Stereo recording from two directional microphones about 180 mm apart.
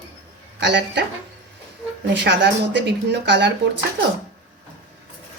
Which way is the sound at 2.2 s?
75° right (ahead or behind).